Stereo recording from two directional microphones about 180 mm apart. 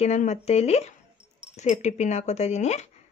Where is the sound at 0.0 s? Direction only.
40° left (ahead or behind).